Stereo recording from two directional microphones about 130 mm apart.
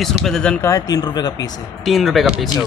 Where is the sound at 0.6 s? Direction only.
25° left (ahead or behind).